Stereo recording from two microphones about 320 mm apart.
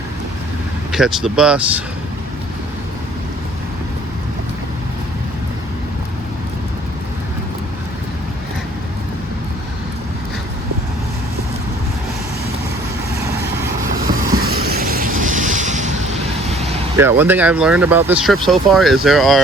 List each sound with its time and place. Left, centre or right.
0.9 s speech: centre
14.3 s vehicle: right
17.0 s speech: centre